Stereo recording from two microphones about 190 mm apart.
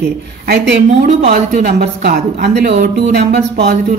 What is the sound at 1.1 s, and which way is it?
Speech, 35° right (ahead or behind).